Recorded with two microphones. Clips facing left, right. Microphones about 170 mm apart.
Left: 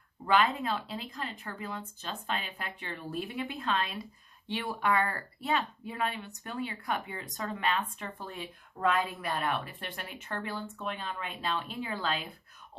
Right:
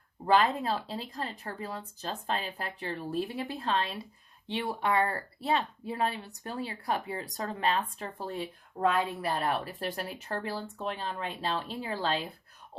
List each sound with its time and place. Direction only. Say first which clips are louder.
0.3 s speech: right 2 dB; 35° right (ahead or behind)